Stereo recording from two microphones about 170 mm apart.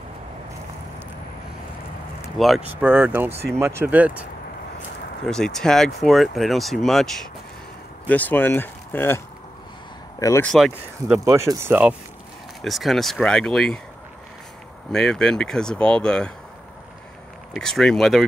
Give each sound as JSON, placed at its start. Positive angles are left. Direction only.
{"t": 2.3, "sound": "speech", "side_deg": 0}
{"t": 5.2, "sound": "speech", "side_deg": 5}
{"t": 10.4, "sound": "speech", "side_deg": 0}
{"t": 11.2, "sound": "speech", "side_deg": -20}
{"t": 12.6, "sound": "speech", "side_deg": 0}
{"t": 14.9, "sound": "speech", "side_deg": 5}
{"t": 17.6, "sound": "speech", "side_deg": 5}